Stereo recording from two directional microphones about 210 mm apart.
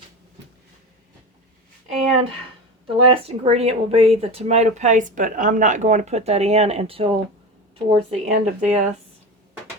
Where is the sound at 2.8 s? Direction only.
25° right (ahead or behind).